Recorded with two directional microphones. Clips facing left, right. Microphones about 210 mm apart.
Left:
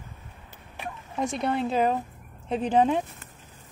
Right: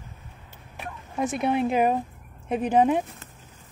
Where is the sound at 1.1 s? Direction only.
5° right (ahead or behind).